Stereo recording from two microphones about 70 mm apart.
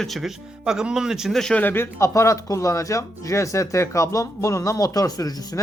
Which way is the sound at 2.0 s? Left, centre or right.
Left.